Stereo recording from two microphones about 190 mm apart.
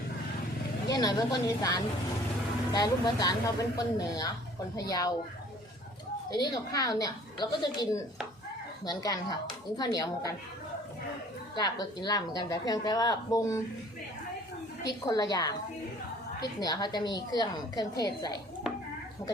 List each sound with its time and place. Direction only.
0.9 s a woman's voice: 20° left (ahead or behind)
6.3 s a woman's voice: 20° left (ahead or behind)
11.5 s a woman's voice: 20° left (ahead or behind)
14.8 s a woman's voice: 20° left (ahead or behind)